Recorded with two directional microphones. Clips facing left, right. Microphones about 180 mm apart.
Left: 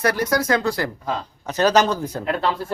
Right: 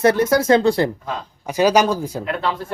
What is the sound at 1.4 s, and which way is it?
Speech, 10° right (ahead or behind).